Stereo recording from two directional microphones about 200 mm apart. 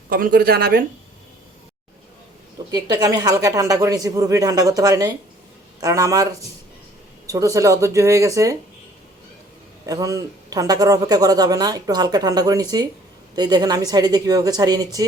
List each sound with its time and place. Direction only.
0.1 s speech: 45° right (ahead or behind)
2.6 s speech: 20° right (ahead or behind)
9.8 s speech: 15° right (ahead or behind)